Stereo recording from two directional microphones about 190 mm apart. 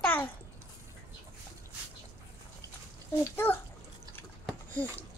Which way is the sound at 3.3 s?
10° left (ahead or behind).